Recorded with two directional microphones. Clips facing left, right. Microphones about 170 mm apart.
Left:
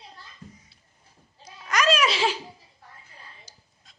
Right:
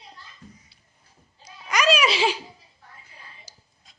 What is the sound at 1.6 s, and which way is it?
Baby laughter, centre (ahead or behind).